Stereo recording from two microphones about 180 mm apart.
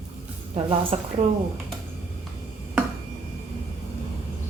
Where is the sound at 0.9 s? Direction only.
35° right (ahead or behind).